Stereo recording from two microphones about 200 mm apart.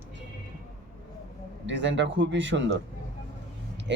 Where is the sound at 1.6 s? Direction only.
65° right (ahead or behind).